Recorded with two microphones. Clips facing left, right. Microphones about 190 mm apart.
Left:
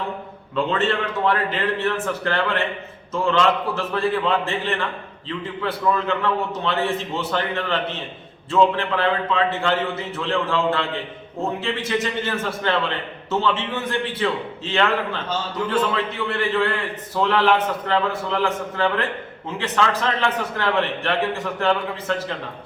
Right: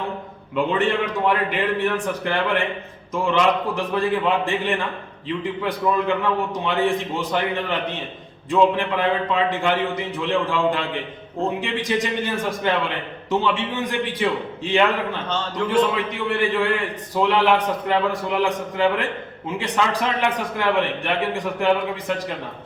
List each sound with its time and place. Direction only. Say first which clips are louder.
0.5 s a man's voice: right 1 dB; 15° right (ahead or behind)